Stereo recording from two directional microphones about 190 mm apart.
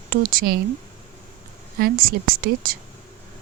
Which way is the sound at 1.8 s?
50° right (ahead or behind).